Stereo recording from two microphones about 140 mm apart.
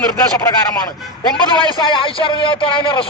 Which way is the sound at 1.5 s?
35° left (ahead or behind).